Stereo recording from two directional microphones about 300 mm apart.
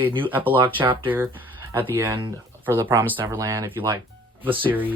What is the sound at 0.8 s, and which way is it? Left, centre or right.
Speech, centre.